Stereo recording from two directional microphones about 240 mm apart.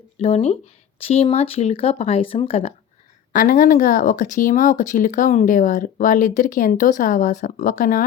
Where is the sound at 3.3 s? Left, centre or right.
Left.